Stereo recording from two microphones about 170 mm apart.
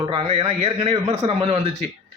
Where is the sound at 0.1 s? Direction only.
30° right (ahead or behind).